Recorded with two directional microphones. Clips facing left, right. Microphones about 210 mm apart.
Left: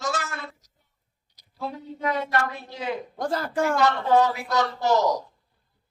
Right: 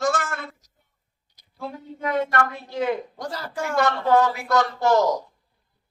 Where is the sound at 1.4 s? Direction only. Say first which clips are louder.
Even; 50° right (ahead or behind).